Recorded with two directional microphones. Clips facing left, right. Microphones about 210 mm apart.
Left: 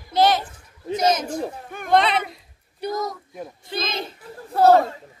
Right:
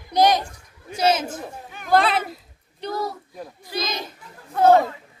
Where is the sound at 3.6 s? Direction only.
25° left (ahead or behind).